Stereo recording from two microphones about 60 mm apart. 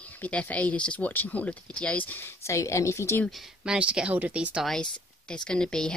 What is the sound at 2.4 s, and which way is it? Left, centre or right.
Speech, left.